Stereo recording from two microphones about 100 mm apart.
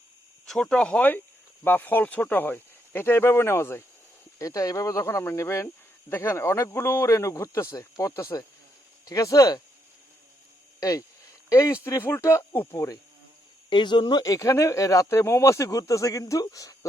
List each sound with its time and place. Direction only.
0.4 s speech: 5° left (ahead or behind); by 9.6 s 35° left (ahead or behind)
10.8 s speech: 35° left (ahead or behind)
13.7 s speech: 50° left (ahead or behind)
14.3 s speech: 35° left (ahead or behind)